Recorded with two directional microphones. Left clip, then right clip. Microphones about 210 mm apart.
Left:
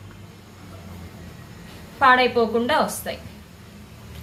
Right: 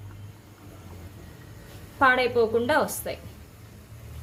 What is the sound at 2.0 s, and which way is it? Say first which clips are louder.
A woman's voice: left 4 dB; 35° right (ahead or behind).